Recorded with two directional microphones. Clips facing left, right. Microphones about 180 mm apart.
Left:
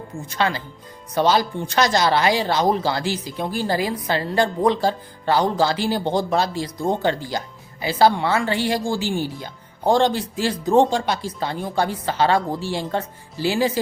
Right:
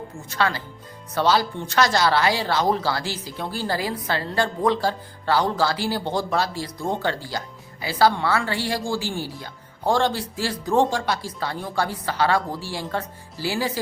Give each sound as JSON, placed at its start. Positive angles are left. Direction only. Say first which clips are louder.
{"t": 0.3, "sound": "speech", "louder": "left 1 dB", "side_deg": 20}